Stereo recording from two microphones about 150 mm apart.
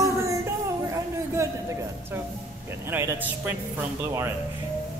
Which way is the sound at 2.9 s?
15° right (ahead or behind).